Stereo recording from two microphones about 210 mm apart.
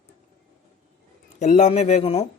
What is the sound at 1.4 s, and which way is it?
Speech, 35° left (ahead or behind).